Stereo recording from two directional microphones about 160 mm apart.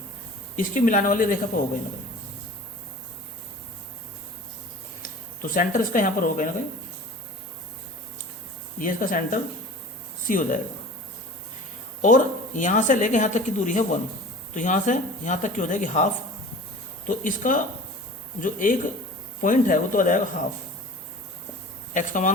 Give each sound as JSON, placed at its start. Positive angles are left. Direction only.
{"t": 0.5, "sound": "speech", "side_deg": 55}
{"t": 5.4, "sound": "speech", "side_deg": 55}
{"t": 8.8, "sound": "speech", "side_deg": 55}
{"t": 12.0, "sound": "speech", "side_deg": 55}
{"t": 17.1, "sound": "speech", "side_deg": 55}
{"t": 21.9, "sound": "speech", "side_deg": 55}